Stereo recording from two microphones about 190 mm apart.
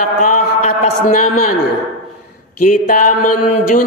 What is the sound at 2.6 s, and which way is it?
Speech, 45° left (ahead or behind).